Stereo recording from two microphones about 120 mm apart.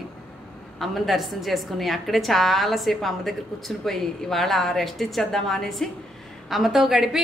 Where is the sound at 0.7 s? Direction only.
Centre (ahead or behind).